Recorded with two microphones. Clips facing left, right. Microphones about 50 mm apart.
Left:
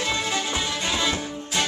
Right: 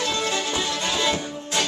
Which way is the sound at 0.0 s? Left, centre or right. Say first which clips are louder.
Right 1 dB; centre.